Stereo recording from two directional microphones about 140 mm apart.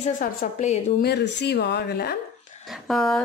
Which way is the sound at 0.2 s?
65° left (ahead or behind).